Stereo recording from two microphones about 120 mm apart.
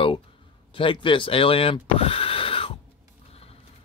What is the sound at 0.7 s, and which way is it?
Speech, 45° left (ahead or behind).